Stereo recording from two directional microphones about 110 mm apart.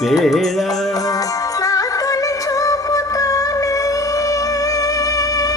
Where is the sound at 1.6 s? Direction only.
30° left (ahead or behind).